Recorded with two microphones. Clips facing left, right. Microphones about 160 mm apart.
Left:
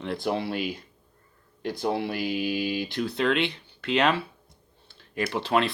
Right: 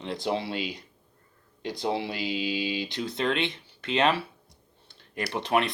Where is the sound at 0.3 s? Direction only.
55° left (ahead or behind).